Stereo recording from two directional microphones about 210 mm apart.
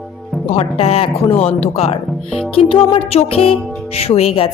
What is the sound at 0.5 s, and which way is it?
A woman's voice, 30° left (ahead or behind).